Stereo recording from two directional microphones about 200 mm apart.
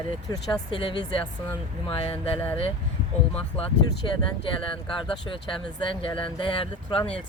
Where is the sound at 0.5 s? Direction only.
25° left (ahead or behind).